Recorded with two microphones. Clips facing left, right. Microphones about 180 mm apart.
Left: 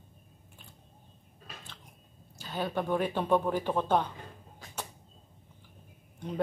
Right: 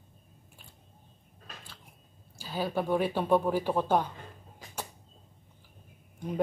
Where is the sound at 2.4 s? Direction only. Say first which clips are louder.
Right 1 dB; 10° right (ahead or behind).